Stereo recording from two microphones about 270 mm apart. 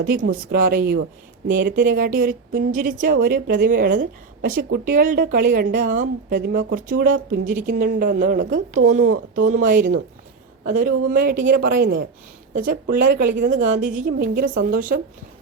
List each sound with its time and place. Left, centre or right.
0.0 s a woman's voice: right
13.5 s a woman's voice: right